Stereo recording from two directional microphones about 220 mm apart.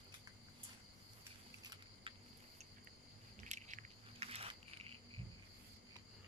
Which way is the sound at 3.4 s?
35° right (ahead or behind).